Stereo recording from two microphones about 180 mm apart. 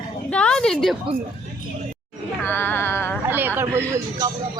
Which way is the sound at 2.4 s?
10° left (ahead or behind).